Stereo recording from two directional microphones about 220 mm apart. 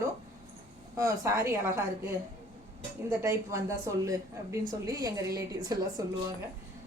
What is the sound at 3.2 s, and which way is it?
A woman's voice, 15° right (ahead or behind).